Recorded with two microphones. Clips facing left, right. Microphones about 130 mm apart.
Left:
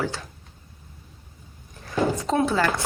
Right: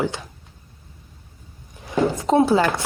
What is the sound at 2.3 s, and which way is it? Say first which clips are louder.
Speech: right 7 dB; 30° right (ahead or behind).